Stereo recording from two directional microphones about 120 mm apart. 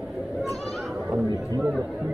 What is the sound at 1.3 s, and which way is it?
Chatter, 30° right (ahead or behind).